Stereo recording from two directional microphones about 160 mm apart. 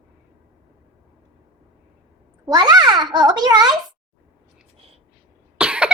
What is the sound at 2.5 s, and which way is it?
A child's voice, 25° right (ahead or behind).